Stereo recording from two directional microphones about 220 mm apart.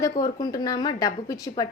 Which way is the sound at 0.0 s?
15° left (ahead or behind).